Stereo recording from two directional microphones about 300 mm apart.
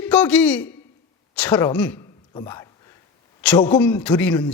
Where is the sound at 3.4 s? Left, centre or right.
Centre.